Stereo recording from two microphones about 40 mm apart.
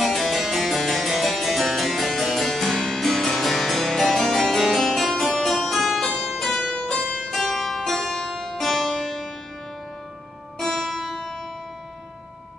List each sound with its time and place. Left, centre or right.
0.0 s harpsichord: centre
6.7 s music: left
7.2 s harpsichord: centre
10.6 s music: centre